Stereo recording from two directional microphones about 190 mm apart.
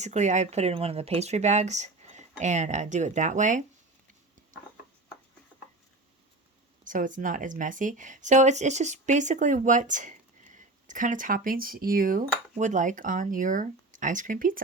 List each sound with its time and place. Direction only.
0.0 s speech: 40° right (ahead or behind)
6.8 s speech: 45° right (ahead or behind)